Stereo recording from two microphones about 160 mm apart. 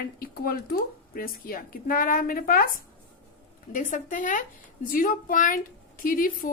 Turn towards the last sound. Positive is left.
turn(degrees=60)  # may be behind; listen again after turning